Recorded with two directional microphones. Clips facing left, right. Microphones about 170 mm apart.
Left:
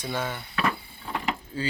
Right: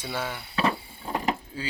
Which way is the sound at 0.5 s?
30° right (ahead or behind).